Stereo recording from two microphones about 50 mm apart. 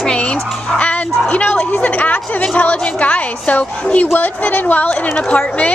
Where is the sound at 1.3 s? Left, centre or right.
Left.